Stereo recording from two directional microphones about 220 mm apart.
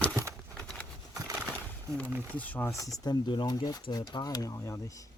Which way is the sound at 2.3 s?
5° left (ahead or behind).